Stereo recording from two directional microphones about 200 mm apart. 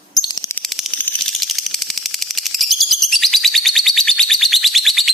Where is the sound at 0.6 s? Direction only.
Centre (ahead or behind).